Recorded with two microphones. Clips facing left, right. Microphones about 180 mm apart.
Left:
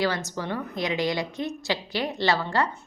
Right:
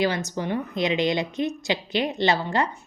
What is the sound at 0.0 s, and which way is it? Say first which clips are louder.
A woman's voice: right 2 dB; 20° right (ahead or behind).